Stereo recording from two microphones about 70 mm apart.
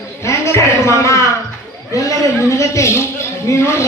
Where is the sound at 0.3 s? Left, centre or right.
Left.